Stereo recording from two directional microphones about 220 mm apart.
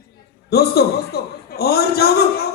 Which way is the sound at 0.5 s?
45° left (ahead or behind).